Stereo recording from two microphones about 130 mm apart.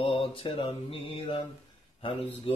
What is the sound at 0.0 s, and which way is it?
Speech, 45° left (ahead or behind).